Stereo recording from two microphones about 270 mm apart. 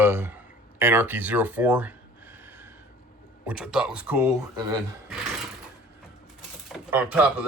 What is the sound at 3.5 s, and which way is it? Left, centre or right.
Speech, centre.